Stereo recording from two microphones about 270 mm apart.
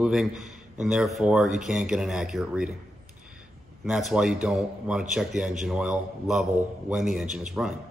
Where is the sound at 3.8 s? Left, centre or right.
Centre.